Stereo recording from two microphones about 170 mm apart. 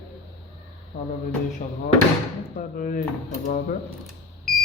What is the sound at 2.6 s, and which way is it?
Speech, 50° left (ahead or behind).